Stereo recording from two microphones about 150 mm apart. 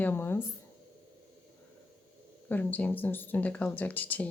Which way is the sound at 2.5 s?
10° left (ahead or behind).